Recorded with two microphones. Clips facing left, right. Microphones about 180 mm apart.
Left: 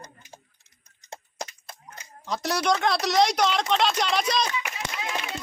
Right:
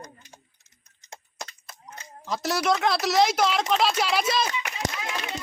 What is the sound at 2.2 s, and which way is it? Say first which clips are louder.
Speech: even; centre (ahead or behind).